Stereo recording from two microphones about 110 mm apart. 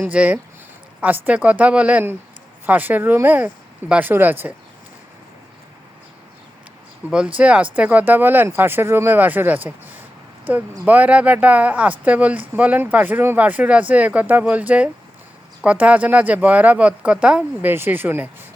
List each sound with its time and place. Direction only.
0.0 s speech: 15° right (ahead or behind)
7.1 s speech: 10° right (ahead or behind)